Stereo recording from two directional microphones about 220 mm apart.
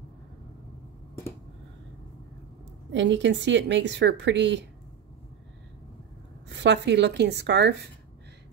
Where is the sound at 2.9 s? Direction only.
55° right (ahead or behind).